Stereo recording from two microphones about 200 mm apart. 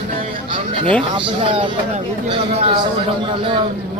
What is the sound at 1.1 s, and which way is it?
Speech, 25° right (ahead or behind).